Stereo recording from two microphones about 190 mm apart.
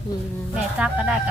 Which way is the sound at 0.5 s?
5° right (ahead or behind).